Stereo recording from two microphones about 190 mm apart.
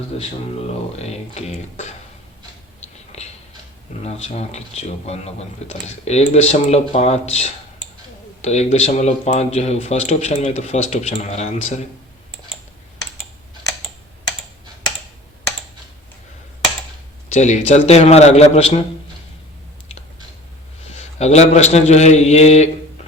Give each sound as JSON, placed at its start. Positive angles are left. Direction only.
{"t": 0.1, "sound": "speech", "side_deg": 30}
{"t": 2.8, "sound": "a sound", "side_deg": 35}
{"t": 4.0, "sound": "speech", "side_deg": 35}
{"t": 17.2, "sound": "speech", "side_deg": 35}
{"t": 20.8, "sound": "a man's voice", "side_deg": 35}